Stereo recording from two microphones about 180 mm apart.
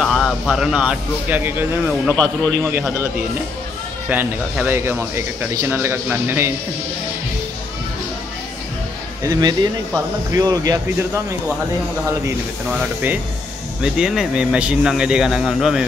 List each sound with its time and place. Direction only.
0.0 s speech: centre (ahead or behind)
2.0 s speech: 5° left (ahead or behind)
2.6 s speech: 15° right (ahead or behind)
4.1 s speech: 10° right (ahead or behind)
9.2 s speech: 20° right (ahead or behind)
12.6 s speech: 5° right (ahead or behind)